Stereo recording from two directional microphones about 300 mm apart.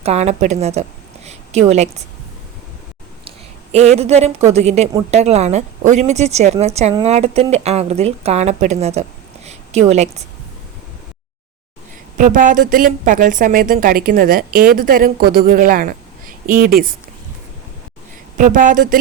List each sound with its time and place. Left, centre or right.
0.0 s a woman's voice: right
3.2 s a sound: right
4.5 s a woman's voice: right
12.1 s speech: right
18.3 s speech: right